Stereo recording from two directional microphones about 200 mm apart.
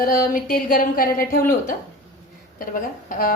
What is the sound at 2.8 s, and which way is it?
Speech, 45° left (ahead or behind).